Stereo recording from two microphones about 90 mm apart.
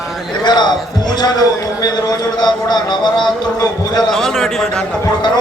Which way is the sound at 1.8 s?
50° left (ahead or behind).